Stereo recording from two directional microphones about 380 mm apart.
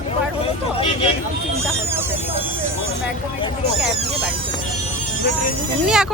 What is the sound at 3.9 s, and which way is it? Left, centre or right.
Speech, centre.